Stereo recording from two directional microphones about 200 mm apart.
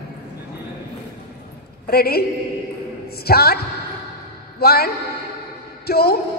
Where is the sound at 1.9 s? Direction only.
50° left (ahead or behind).